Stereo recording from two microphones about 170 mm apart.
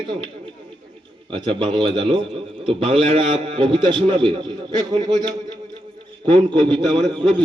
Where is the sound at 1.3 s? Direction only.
30° right (ahead or behind).